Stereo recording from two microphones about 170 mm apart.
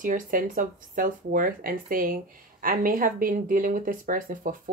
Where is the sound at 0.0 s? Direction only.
50° right (ahead or behind).